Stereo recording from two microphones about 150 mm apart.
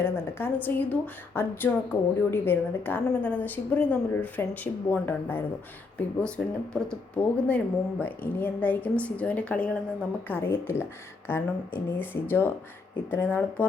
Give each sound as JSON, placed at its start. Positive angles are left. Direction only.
{"t": 0.0, "sound": "speech", "side_deg": 15}
{"t": 7.4, "sound": "speech", "side_deg": 10}